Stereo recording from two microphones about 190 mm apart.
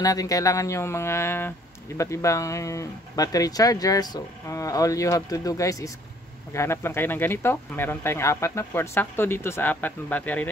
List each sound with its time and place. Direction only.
0.0 s speech: 20° left (ahead or behind)